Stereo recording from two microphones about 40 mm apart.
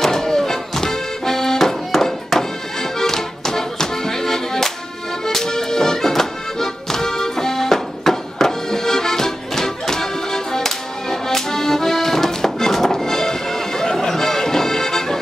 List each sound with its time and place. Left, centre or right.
0.0 s accordion: centre
3.0 s music: centre